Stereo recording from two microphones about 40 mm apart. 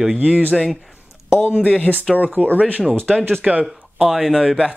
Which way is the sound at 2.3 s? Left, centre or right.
Right.